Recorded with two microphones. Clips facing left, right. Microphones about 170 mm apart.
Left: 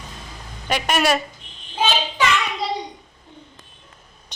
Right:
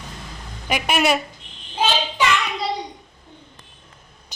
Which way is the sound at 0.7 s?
10° right (ahead or behind).